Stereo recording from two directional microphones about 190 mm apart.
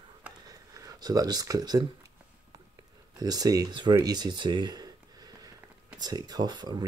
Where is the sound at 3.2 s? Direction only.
20° right (ahead or behind).